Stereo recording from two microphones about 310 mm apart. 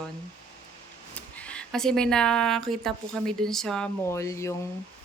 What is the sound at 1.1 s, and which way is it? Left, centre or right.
Speech, centre.